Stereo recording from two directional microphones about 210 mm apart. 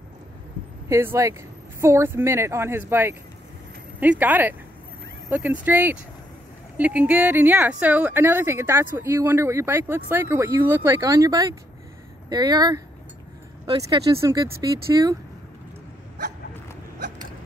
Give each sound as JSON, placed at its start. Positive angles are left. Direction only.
{"t": 0.8, "sound": "speech", "side_deg": -15}